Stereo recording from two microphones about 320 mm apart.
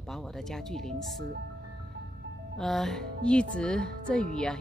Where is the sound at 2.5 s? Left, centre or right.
Centre.